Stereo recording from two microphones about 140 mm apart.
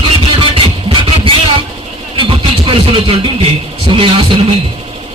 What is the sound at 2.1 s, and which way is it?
Music, 40° right (ahead or behind).